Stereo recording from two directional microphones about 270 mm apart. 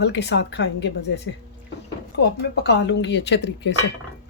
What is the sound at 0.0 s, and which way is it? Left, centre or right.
Speech, left.